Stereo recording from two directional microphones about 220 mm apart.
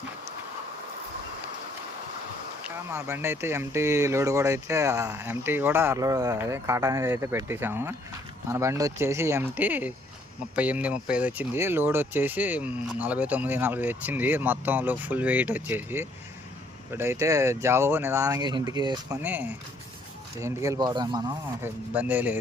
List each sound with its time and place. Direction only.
2.6 s speech: 10° right (ahead or behind)